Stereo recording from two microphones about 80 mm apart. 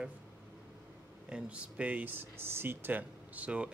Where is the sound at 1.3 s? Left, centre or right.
Centre.